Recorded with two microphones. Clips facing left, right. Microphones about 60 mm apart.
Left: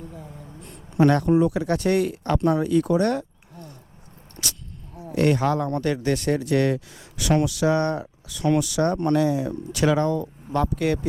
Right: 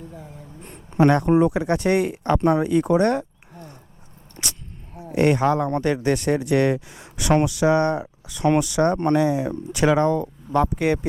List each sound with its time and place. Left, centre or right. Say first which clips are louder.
0.1 s a sound: even; right
0.6 s speech: right 1 dB; right
4.4 s vehicle: right 1 dB; right
5.1 s speech: right 2 dB; right